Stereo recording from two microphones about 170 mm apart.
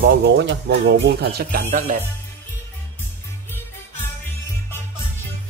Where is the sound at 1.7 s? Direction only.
55° right (ahead or behind).